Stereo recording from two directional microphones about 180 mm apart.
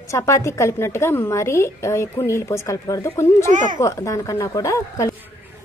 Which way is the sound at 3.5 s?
45° right (ahead or behind).